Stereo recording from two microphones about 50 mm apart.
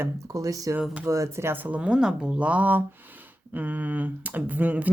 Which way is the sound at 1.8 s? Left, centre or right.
Right.